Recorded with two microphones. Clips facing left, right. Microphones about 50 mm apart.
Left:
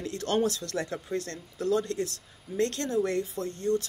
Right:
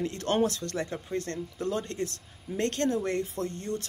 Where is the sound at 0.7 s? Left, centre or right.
Right.